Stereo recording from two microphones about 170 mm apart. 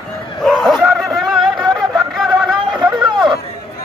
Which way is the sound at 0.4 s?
Centre (ahead or behind).